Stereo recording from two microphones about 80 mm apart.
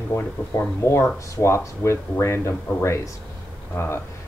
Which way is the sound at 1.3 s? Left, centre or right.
Left.